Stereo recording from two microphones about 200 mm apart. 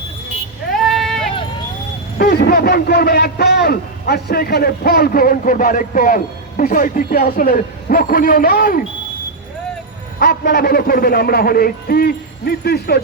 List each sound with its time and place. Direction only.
0.7 s sheep: centre (ahead or behind)
2.1 s a man's voice: 50° left (ahead or behind)
10.2 s a man's voice: 50° left (ahead or behind)